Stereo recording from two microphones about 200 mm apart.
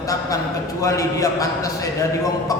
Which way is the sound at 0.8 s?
15° left (ahead or behind).